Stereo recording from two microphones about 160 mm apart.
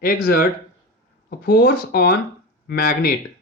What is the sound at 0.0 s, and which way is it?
Speech, 70° left (ahead or behind).